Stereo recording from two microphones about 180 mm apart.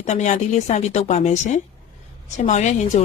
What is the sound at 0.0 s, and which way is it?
Speech, 40° left (ahead or behind).